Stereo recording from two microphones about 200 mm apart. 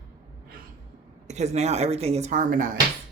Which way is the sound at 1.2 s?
35° right (ahead or behind).